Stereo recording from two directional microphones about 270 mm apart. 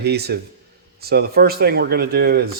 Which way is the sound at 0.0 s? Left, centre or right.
Right.